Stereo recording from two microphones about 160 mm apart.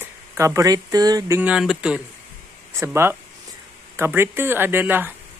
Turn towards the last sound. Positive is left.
turn(degrees=-10)  # may be behind; listen again after turning